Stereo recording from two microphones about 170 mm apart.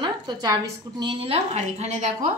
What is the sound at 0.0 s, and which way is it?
A woman's voice, 25° right (ahead or behind).